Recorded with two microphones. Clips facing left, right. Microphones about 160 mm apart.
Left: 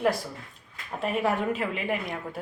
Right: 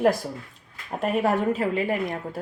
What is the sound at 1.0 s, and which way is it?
Speech, 45° right (ahead or behind).